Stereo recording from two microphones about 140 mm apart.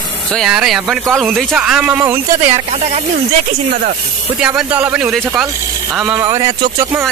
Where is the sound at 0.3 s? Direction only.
Centre (ahead or behind); by 2.5 s 15° right (ahead or behind).